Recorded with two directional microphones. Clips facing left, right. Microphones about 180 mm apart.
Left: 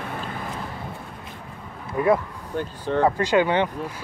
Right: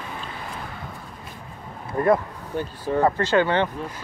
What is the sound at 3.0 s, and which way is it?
Speech, 10° left (ahead or behind).